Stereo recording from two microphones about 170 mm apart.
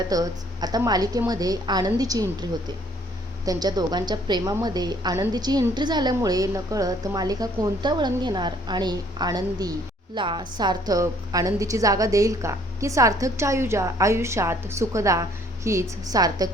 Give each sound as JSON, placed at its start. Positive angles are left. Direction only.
{"t": 0.1, "sound": "a woman's voice", "side_deg": -20}